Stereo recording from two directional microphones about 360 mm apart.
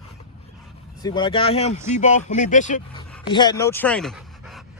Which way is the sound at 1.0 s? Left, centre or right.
Centre.